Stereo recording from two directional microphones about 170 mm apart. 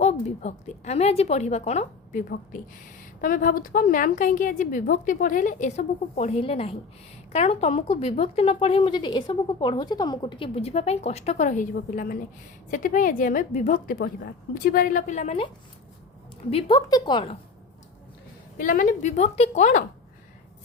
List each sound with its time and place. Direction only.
0.0 s speech: 40° left (ahead or behind)
3.2 s a woman's voice: 55° left (ahead or behind)
16.5 s a woman's voice: 30° left (ahead or behind)
18.5 s a woman's voice: 55° left (ahead or behind)